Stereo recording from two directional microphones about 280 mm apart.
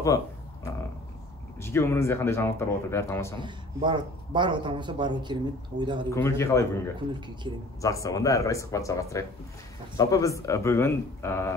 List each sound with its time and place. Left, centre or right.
1.6 s speech: centre
3.3 s speech: centre
6.0 s speech: centre
7.8 s speech: centre